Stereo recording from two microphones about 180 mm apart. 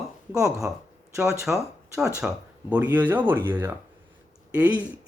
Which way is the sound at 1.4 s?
Centre (ahead or behind).